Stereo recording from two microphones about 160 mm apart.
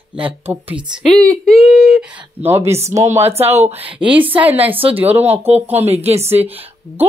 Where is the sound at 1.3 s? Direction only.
5° left (ahead or behind).